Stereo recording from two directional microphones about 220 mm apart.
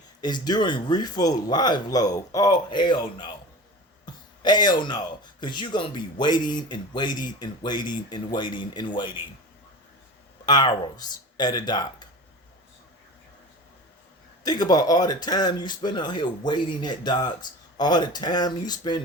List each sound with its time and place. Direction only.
0.2 s speech: 20° left (ahead or behind)
4.0 s a sound: 20° left (ahead or behind)
5.4 s speech: 20° left (ahead or behind)
10.4 s speech: 20° left (ahead or behind)
14.4 s speech: 20° left (ahead or behind)